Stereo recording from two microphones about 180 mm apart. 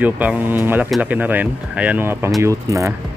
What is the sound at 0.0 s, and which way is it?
Speech, 10° right (ahead or behind).